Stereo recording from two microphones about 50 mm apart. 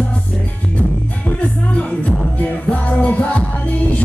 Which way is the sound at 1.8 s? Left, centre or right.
Left.